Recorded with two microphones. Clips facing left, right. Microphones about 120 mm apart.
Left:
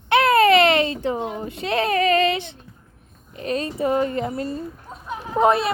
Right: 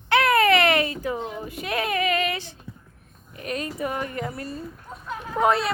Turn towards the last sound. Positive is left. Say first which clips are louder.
# left 4 dB
turn(degrees=20)  # may be behind; listen again after turning